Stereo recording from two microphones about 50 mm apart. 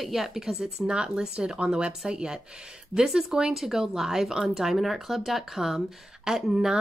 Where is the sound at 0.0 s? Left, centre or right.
Centre.